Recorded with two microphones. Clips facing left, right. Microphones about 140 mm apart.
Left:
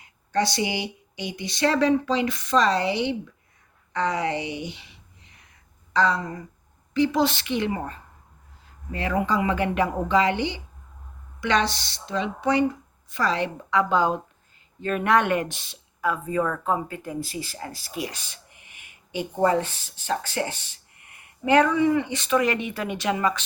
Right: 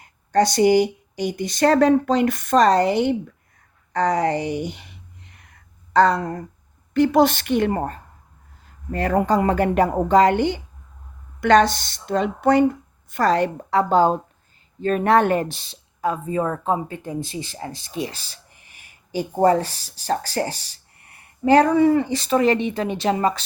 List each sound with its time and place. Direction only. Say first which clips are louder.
0.0 s speech: right 6 dB; 45° right (ahead or behind)
3.9 s a sound: right 5 dB; 45° right (ahead or behind)
6.9 s speech: right 5 dB; 55° right (ahead or behind); by 23.4 s 35° right (ahead or behind)